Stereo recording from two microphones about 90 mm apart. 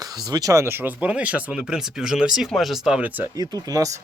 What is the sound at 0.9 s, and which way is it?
Speech, 10° right (ahead or behind).